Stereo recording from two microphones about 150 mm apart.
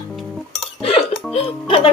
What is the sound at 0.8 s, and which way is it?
Music, 40° left (ahead or behind).